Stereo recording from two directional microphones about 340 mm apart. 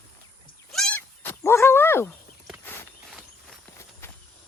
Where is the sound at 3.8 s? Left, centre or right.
Centre.